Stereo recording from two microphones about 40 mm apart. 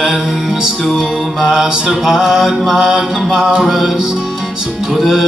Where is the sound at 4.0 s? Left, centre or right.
Centre.